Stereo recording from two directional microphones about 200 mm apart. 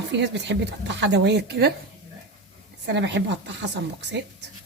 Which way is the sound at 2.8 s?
60° right (ahead or behind).